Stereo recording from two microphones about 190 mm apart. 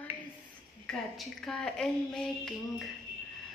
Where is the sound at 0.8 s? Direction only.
5° left (ahead or behind).